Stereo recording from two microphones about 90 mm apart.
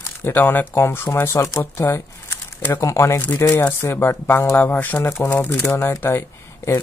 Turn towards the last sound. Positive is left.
turn(degrees=30)  # may be behind; listen again after turning